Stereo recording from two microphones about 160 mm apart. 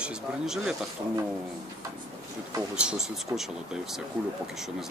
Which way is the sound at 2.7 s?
5° right (ahead or behind).